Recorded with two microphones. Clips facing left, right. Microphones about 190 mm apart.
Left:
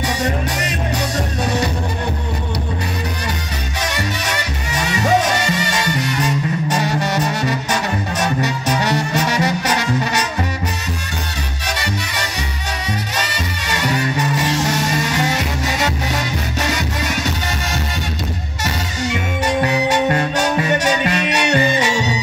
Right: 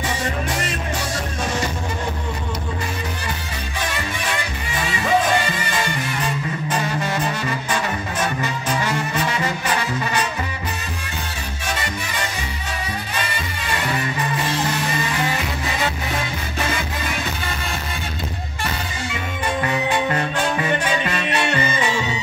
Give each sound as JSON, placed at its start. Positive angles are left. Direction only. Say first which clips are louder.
{"t": 4.9, "sound": "music", "louder": "left 3 dB", "side_deg": 40}
{"t": 5.9, "sound": "music", "louder": "left 5 dB", "side_deg": 75}
{"t": 9.1, "sound": "brass instrument", "louder": "left 5 dB", "side_deg": 75}
{"t": 13.1, "sound": "music", "louder": "left 3 dB", "side_deg": 80}
{"t": 18.6, "sound": "music", "louder": "left 4 dB", "side_deg": 75}